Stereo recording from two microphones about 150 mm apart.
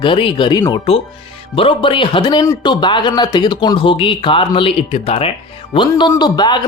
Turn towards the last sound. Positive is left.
turn(degrees=30)  # may be behind; listen again after turning